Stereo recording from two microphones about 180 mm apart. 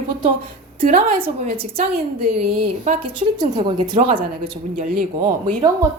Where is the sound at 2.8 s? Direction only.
45° right (ahead or behind).